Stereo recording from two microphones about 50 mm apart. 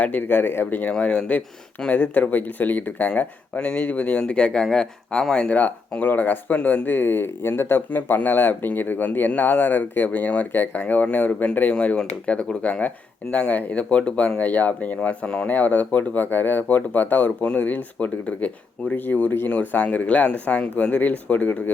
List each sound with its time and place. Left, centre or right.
0.0 s speech: left
0.9 s speech: left
1.9 s speech: left
4.6 s speech: centre
6.0 s speech: left
6.6 s speech: left
6.8 s speech: left
7.9 s speech: left
11.7 s speech: left
13.3 s speech: left
17.4 s speech: left
17.7 s speech: left
19.7 s speech: left